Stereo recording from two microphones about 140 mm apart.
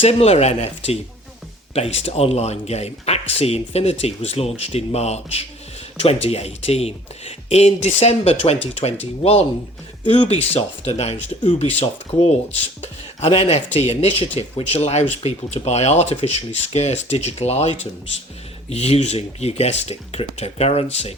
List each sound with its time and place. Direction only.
0.0 s speech: 45° left (ahead or behind)
18.7 s speech: 50° left (ahead or behind)